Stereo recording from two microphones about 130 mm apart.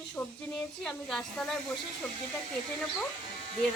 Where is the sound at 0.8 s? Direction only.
5° left (ahead or behind).